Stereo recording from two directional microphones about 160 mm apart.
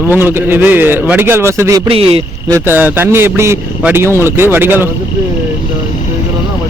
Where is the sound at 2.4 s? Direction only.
15° right (ahead or behind).